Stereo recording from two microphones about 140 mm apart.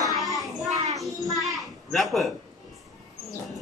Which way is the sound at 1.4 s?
Centre (ahead or behind).